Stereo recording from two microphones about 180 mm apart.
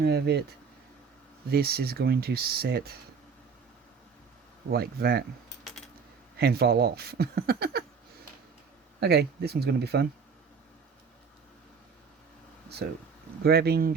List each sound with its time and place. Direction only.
0.0 s speech: 65° right (ahead or behind)
1.5 s speech: 60° right (ahead or behind)
4.7 s speech: 60° right (ahead or behind)
6.4 s speech: 60° right (ahead or behind)
9.0 s speech: 65° right (ahead or behind)
13.4 s speech: 60° right (ahead or behind)